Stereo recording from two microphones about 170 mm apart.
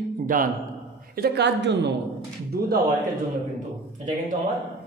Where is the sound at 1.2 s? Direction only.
80° right.